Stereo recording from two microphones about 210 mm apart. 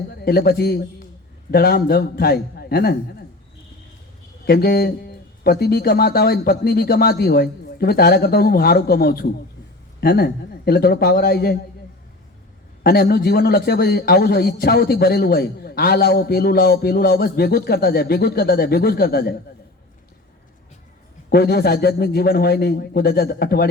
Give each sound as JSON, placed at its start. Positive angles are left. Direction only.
{"t": 0.3, "sound": "a man's voice", "side_deg": 45}
{"t": 4.4, "sound": "a man's voice", "side_deg": 45}
{"t": 12.8, "sound": "a man's voice", "side_deg": 45}
{"t": 21.2, "sound": "a man's voice", "side_deg": 45}